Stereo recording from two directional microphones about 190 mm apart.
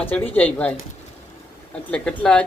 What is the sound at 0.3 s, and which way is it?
Speech, 10° left (ahead or behind).